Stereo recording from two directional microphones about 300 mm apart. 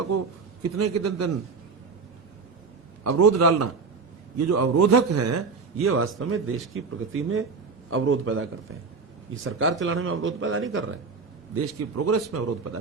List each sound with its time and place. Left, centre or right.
0.8 s a man's voice: right
3.0 s a man's voice: right
11.5 s speech: right